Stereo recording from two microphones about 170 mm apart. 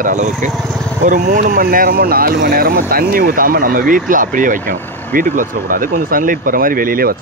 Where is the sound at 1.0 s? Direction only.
50° right (ahead or behind).